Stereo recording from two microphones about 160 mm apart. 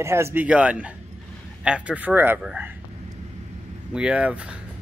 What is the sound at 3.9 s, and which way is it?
Speech, 5° right (ahead or behind).